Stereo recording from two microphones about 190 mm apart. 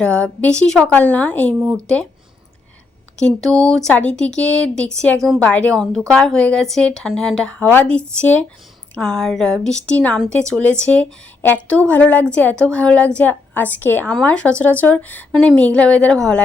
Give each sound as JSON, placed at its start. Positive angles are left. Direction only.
{"t": 0.0, "sound": "a woman's voice", "side_deg": 5}
{"t": 1.5, "sound": "speech", "side_deg": -15}
{"t": 3.2, "sound": "a woman's voice", "side_deg": 5}